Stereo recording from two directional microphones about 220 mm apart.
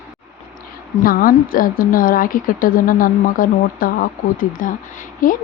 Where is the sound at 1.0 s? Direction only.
40° left (ahead or behind).